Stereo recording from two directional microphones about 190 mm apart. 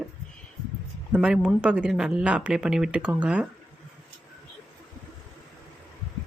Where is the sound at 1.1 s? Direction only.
5° right (ahead or behind).